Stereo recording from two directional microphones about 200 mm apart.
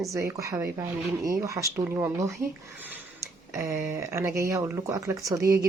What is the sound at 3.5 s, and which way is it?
Speech, 15° right (ahead or behind).